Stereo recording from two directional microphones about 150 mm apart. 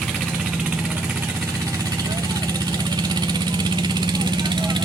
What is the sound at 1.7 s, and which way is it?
Vehicle, 25° right (ahead or behind).